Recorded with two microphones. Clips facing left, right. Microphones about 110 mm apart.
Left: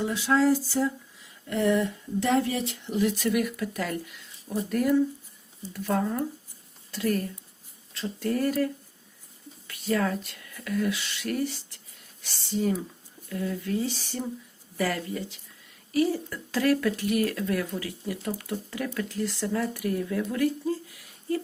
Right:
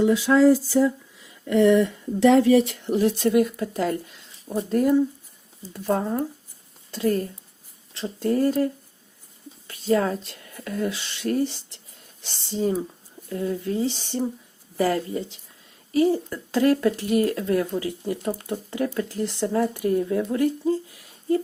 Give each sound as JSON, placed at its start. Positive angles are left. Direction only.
{"t": 1.5, "sound": "speech", "side_deg": -90}
{"t": 2.8, "sound": "speech", "side_deg": -40}